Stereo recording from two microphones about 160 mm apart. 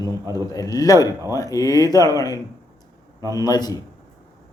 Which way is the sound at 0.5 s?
20° left (ahead or behind).